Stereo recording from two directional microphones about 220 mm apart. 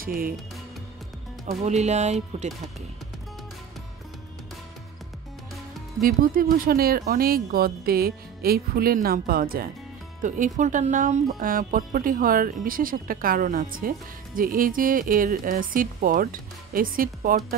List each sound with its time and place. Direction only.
0.0 s speech: 40° right (ahead or behind)
1.6 s speech: 30° right (ahead or behind)
5.9 s speech: 40° right (ahead or behind)